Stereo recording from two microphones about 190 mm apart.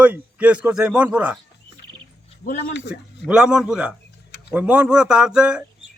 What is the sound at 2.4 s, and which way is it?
Speech, 50° left (ahead or behind).